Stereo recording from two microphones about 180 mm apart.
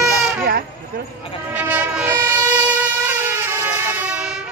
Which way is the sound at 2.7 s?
10° right (ahead or behind).